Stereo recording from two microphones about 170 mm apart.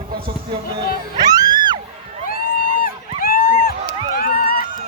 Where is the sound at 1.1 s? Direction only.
25° right (ahead or behind).